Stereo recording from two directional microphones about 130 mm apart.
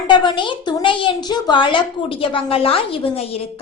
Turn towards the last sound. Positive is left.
turn(degrees=50)  # may be behind; listen again after turning